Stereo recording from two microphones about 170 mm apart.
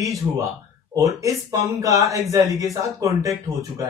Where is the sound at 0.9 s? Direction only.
20° right (ahead or behind).